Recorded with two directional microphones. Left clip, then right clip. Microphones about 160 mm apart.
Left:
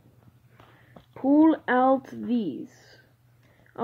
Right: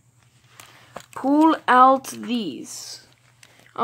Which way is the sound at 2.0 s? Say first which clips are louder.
Right 2 dB; centre (ahead or behind).